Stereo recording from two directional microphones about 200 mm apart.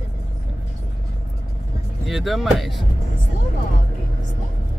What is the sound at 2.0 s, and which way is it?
Speech, centre (ahead or behind).